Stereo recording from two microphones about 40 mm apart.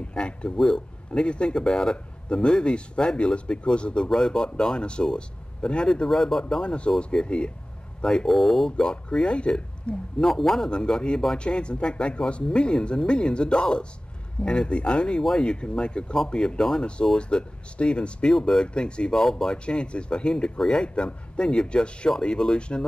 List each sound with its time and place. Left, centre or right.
0.1 s speech: left
6.0 s speech: centre
6.6 s speech: left
8.3 s speech: centre; by 9.9 s left
10.2 s speech: centre
10.7 s speech: left
18.3 s speech: centre
19.1 s speech: centre
19.6 s speech: left
20.5 s speech: centre
20.8 s speech: left